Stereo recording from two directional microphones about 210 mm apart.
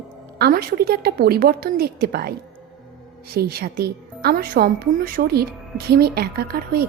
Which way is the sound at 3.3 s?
50° right (ahead or behind).